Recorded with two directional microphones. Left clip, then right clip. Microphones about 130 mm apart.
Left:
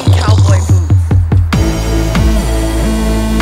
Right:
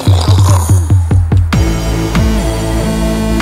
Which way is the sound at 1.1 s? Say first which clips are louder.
Even; centre (ahead or behind).